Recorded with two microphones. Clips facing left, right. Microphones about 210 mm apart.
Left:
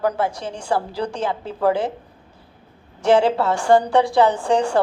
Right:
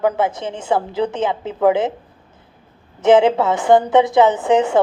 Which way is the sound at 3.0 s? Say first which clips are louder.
Right 4 dB; 20° right (ahead or behind).